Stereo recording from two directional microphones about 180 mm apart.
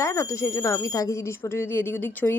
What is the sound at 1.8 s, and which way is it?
Speech, 15° left (ahead or behind).